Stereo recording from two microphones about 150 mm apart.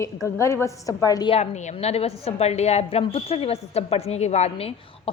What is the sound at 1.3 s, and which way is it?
A woman's voice, 50° left (ahead or behind).